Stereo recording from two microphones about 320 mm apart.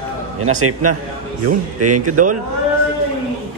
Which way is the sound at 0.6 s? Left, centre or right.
Right.